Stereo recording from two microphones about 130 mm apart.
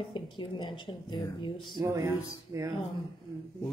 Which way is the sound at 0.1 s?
40° left (ahead or behind).